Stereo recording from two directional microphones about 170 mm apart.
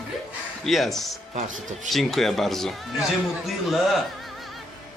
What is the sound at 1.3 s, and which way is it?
Speech, 45° right (ahead or behind).